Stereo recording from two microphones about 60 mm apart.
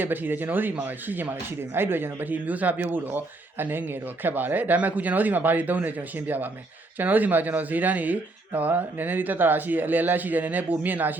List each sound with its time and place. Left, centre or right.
0.0 s speech: right